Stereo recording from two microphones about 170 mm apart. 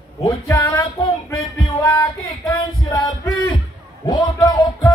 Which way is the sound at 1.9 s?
15° left (ahead or behind).